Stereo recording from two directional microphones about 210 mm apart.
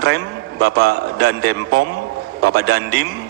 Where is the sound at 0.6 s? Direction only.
50° right (ahead or behind).